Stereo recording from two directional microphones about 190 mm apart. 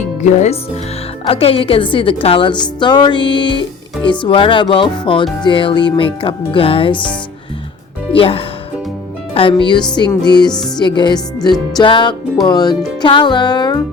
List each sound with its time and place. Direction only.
0.2 s a woman's voice: 40° left (ahead or behind)
8.1 s a woman's voice: 30° left (ahead or behind)